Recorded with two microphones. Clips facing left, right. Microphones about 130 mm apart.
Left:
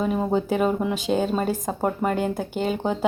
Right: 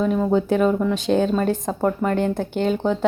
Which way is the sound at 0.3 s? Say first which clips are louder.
Right 3 dB; 5° left (ahead or behind).